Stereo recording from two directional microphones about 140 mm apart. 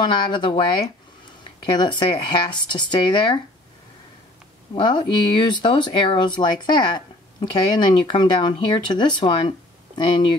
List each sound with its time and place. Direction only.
0.0 s speech: 35° left (ahead or behind)
1.8 s speech: 35° left (ahead or behind)
4.7 s speech: 35° left (ahead or behind)